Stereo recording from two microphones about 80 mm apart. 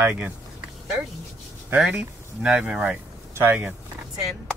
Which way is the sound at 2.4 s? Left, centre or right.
Centre.